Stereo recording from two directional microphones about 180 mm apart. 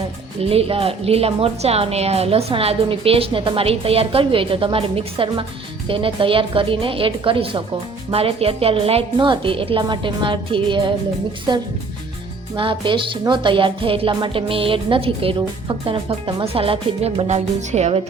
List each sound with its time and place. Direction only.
0.4 s a woman's voice: 30° right (ahead or behind)
12.5 s a woman's voice: 30° right (ahead or behind)